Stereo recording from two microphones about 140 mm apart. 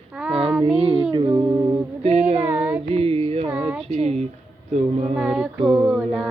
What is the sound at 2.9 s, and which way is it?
Carnatic music, 45° right (ahead or behind).